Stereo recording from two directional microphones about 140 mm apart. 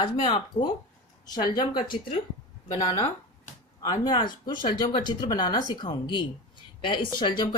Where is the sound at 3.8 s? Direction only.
30° left (ahead or behind).